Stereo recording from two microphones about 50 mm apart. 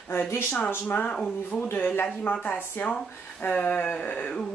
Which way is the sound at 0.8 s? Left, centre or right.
Left.